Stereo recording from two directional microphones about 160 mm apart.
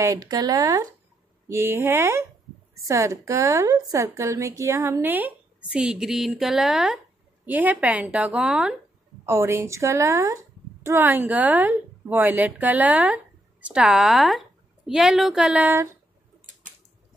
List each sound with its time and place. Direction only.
0.0 s a woman's voice: 20° right (ahead or behind); by 8.7 s 5° right (ahead or behind)
9.2 s a woman's voice: 15° right (ahead or behind)